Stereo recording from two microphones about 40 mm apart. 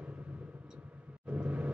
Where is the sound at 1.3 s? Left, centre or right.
Right.